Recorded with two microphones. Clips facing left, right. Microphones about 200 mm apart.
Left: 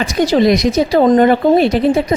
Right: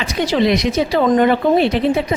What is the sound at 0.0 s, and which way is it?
Speech, 40° left (ahead or behind).